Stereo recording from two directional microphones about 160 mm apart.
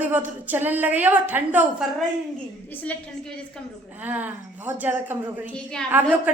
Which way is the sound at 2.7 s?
10° left (ahead or behind).